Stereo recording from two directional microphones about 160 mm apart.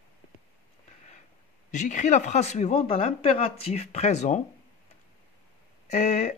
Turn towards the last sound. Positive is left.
turn(degrees=40)  # may be behind; listen again after turning